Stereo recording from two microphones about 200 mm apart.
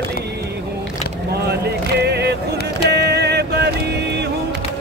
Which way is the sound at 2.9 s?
55° right (ahead or behind).